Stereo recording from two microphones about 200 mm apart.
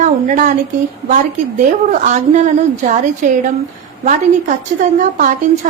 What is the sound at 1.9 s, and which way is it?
A woman's voice, 40° right (ahead or behind).